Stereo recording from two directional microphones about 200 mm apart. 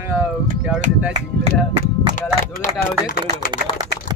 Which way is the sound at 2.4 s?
40° left (ahead or behind).